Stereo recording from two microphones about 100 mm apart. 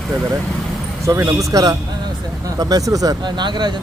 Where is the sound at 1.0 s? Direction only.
30° right (ahead or behind).